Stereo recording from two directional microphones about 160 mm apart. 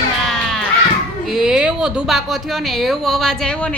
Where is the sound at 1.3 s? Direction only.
5° right (ahead or behind).